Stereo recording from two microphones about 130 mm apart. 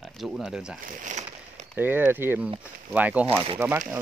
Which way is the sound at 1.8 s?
15° right (ahead or behind).